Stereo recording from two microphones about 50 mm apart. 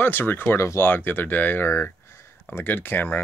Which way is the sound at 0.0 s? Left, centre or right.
Left.